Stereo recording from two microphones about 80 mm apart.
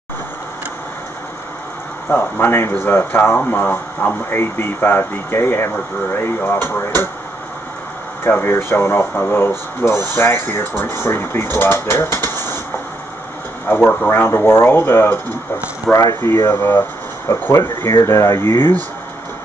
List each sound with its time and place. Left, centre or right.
2.0 s speech: left
8.2 s speech: left
14.0 s speech: left
16.2 s speech: left
17.8 s speech: left